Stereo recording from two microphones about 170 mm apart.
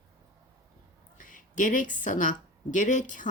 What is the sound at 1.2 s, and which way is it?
A woman's voice, 50° left (ahead or behind).